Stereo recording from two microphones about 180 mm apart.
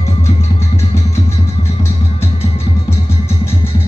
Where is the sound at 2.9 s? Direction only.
15° left (ahead or behind).